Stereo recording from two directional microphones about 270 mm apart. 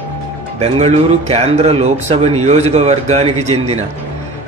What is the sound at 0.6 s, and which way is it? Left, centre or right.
A man's voice, right.